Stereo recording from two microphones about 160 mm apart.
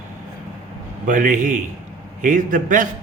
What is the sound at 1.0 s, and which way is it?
Speech, 55° right (ahead or behind).